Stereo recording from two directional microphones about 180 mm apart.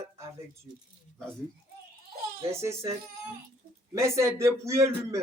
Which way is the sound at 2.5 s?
15° right (ahead or behind).